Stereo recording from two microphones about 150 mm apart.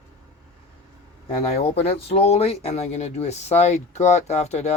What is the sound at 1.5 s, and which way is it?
Speech, 40° left (ahead or behind).